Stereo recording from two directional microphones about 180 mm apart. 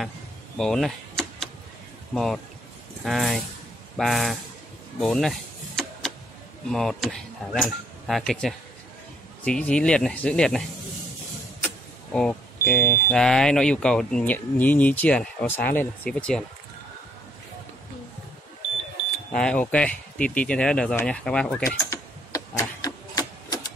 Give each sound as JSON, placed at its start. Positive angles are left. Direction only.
{"t": 0.6, "sound": "power windows", "side_deg": 0}
{"t": 2.1, "sound": "speech", "side_deg": 0}
{"t": 5.0, "sound": "power windows", "side_deg": 0}
{"t": 6.7, "sound": "speech", "side_deg": 0}
{"t": 11.6, "sound": "speech", "side_deg": 5}
{"t": 19.3, "sound": "speech", "side_deg": 5}
{"t": 22.6, "sound": "printer", "side_deg": 20}